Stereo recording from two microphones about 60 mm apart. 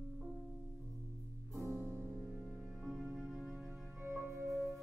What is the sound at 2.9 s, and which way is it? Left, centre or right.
Music, centre.